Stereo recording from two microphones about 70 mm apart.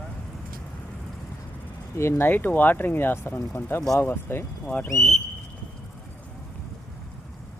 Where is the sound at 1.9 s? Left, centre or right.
Left.